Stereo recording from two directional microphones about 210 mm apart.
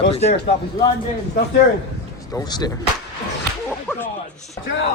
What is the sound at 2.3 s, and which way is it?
Speech, 20° left (ahead or behind).